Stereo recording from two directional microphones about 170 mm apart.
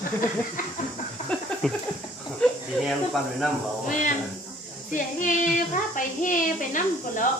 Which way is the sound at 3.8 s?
50° left (ahead or behind).